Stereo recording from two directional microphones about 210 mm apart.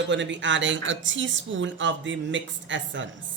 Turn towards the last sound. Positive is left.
turn(degrees=-60)  # may be behind; listen again after turning